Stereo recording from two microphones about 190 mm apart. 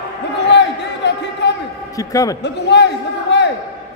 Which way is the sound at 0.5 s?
65° left (ahead or behind).